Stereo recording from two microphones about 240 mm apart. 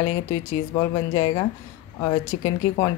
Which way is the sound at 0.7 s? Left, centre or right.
Centre.